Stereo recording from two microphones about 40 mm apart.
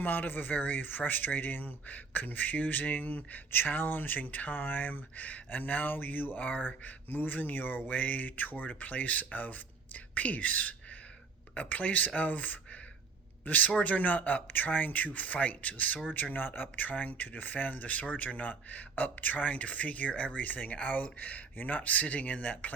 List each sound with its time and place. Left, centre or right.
0.0 s speech: left
16.1 s speech: left